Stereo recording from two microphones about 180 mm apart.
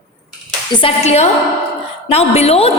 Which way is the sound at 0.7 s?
35° left (ahead or behind).